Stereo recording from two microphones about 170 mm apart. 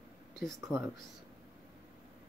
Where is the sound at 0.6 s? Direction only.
15° right (ahead or behind).